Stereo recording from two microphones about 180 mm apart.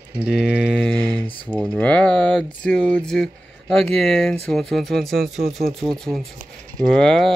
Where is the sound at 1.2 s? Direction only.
30° left (ahead or behind).